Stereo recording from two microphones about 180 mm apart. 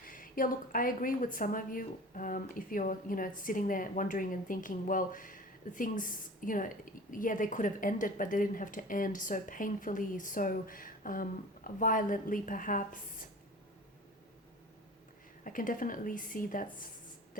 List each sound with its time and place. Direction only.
0.0 s a woman's voice: 50° left (ahead or behind)
15.4 s a woman's voice: 50° left (ahead or behind)